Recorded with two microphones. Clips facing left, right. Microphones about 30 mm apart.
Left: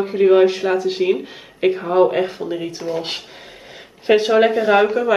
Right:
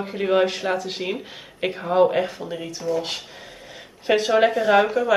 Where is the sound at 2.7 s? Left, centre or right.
Left; by 5.1 s centre.